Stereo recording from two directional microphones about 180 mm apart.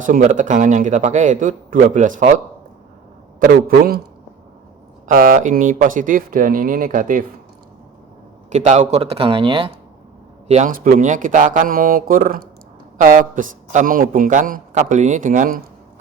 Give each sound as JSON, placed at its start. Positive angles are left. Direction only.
{"t": 0.0, "sound": "a man's voice", "side_deg": -45}
{"t": 3.4, "sound": "a man's voice", "side_deg": -55}
{"t": 5.0, "sound": "a man's voice", "side_deg": -50}
{"t": 8.4, "sound": "a man's voice", "side_deg": -40}
{"t": 10.5, "sound": "a man's voice", "side_deg": -45}